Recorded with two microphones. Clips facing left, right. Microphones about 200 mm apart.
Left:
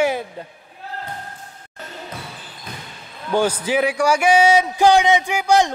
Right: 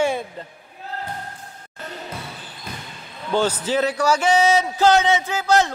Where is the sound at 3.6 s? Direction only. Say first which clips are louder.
Left 2 dB; 10° left (ahead or behind).